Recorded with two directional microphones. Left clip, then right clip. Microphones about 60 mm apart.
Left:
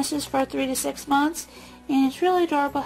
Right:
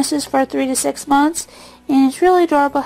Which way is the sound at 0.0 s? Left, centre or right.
Right.